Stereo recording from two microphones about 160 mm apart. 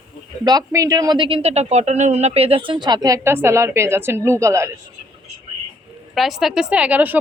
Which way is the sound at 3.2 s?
15° right (ahead or behind).